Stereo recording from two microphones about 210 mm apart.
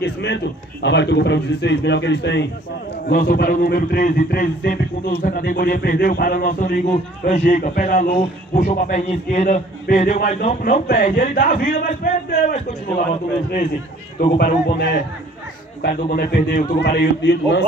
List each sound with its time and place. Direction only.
0.0 s a sound: 55° left (ahead or behind)
0.8 s a man's voice: 55° left (ahead or behind)
3.1 s a man's voice: 45° left (ahead or behind)
14.1 s a man's voice: 40° left (ahead or behind)